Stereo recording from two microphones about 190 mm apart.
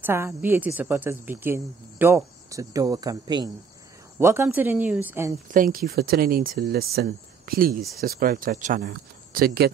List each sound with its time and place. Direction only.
0.0 s a woman's voice: 10° right (ahead or behind)
5.5 s speech: 45° right (ahead or behind)